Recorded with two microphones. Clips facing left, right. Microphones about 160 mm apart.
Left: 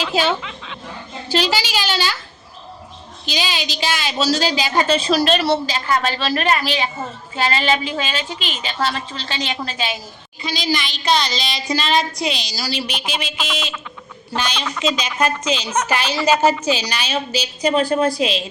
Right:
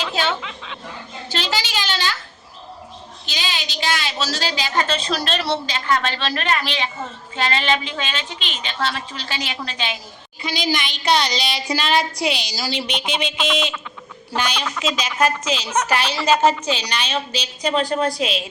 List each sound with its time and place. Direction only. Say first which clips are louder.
0.0 s a sound: left 4 dB; 5° left (ahead or behind)
1.3 s a woman's voice: left 5 dB; 10° left (ahead or behind)
3.2 s a woman's voice: left 5 dB; 15° left (ahead or behind)
9.1 s speech: left 3 dB; 10° right (ahead or behind)
9.6 s a woman's voice: left 3 dB; 5° left (ahead or behind)
10.4 s a woman's voice: left 1 dB; 10° right (ahead or behind)